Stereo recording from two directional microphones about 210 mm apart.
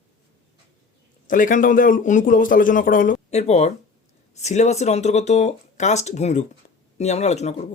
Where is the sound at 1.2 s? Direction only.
40° left (ahead or behind).